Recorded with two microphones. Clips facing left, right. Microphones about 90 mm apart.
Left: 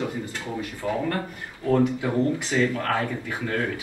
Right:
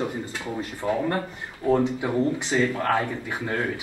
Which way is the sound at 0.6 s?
20° right (ahead or behind).